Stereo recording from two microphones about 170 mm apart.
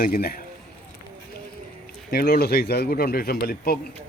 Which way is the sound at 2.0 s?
65° left (ahead or behind).